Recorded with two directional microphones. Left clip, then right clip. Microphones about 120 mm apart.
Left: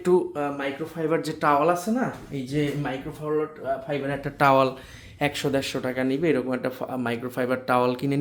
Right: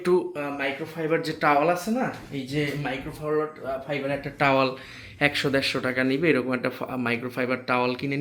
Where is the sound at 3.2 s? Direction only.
75° left (ahead or behind).